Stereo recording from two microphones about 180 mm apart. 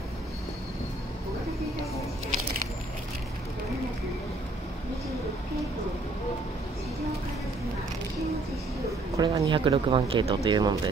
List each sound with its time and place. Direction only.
9.1 s speech: 20° right (ahead or behind)